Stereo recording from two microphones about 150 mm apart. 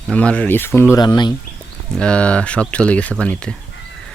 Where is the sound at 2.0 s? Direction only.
5° left (ahead or behind).